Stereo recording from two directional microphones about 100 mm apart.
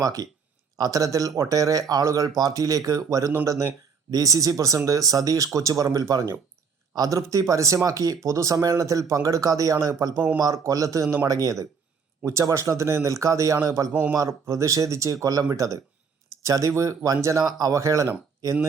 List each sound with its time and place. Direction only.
0.0 s speech: 40° right (ahead or behind)